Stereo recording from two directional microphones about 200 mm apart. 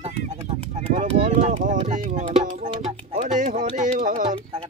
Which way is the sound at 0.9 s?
35° right (ahead or behind).